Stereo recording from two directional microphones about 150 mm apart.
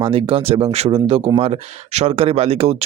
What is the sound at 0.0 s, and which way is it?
Speech, 40° right (ahead or behind).